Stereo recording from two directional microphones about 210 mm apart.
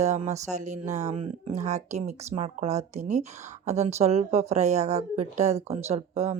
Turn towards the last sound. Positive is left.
turn(degrees=-30)  # may be behind; listen again after turning